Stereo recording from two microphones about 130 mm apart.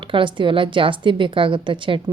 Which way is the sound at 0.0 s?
40° right (ahead or behind).